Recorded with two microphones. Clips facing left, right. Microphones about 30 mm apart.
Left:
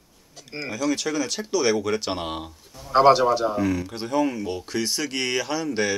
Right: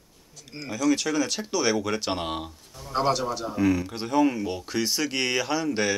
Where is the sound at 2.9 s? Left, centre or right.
Left.